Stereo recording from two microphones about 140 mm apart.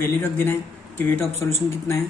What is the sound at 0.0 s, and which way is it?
A man's voice, 15° left (ahead or behind).